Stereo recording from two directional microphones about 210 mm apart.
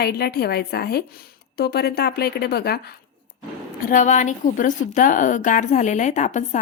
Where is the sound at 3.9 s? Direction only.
35° left (ahead or behind).